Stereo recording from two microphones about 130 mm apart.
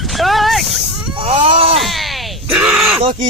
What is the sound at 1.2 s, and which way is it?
Speech, 45° right (ahead or behind).